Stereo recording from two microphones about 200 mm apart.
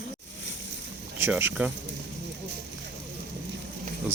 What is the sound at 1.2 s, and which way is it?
Speech, 10° right (ahead or behind).